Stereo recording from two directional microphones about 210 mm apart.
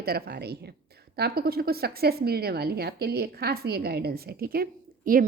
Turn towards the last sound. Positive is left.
turn(degrees=-45)  # may be behind; listen again after turning